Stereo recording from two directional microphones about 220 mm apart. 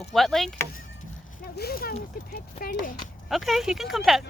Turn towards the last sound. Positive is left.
turn(degrees=0)  # may be behind; listen again after turning